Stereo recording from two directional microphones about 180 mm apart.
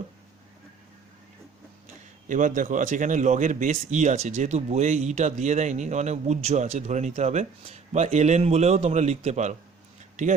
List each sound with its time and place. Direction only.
2.2 s a man's voice: 45° right (ahead or behind)